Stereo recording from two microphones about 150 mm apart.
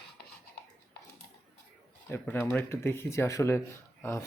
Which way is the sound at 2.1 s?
15° left (ahead or behind).